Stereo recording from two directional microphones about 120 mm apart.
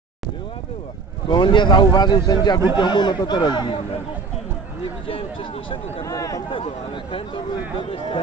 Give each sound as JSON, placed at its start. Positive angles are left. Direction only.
{"t": 1.3, "sound": "speech", "side_deg": 40}
{"t": 5.0, "sound": "speech", "side_deg": 45}
{"t": 6.0, "sound": "speech", "side_deg": 30}
{"t": 6.5, "sound": "speech", "side_deg": 45}